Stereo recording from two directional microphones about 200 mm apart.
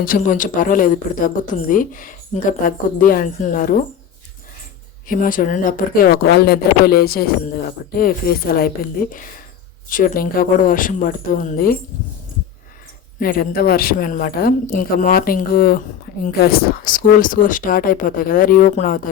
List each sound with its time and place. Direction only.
0.0 s a woman's voice: 40° left (ahead or behind)
5.0 s a woman's voice: 45° left (ahead or behind)
9.9 s a woman's voice: 45° left (ahead or behind)
13.1 s a woman's voice: 45° left (ahead or behind)